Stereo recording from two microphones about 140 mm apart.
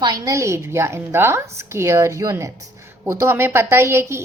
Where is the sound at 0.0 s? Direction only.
25° right (ahead or behind).